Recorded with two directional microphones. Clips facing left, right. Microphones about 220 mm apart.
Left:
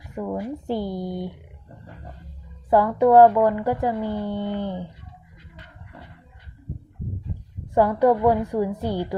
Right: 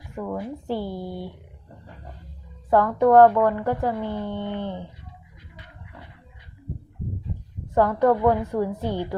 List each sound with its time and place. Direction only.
0.2 s speech: 10° left (ahead or behind)
2.6 s speech: 10° left (ahead or behind)
7.7 s speech: 10° left (ahead or behind)